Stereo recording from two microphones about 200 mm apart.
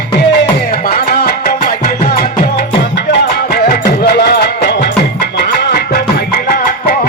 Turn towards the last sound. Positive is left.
turn(degrees=55)  # may be behind; listen again after turning